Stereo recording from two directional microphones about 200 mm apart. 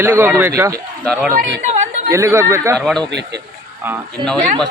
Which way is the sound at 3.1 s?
60° right (ahead or behind).